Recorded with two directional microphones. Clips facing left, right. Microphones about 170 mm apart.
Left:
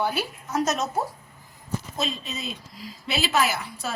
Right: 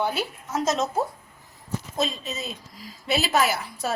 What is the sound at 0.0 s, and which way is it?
Speech, 25° right (ahead or behind).